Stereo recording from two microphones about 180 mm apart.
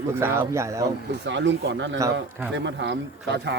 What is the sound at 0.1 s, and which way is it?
Speech, 15° right (ahead or behind).